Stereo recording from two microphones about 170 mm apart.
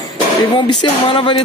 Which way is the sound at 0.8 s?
30° left (ahead or behind).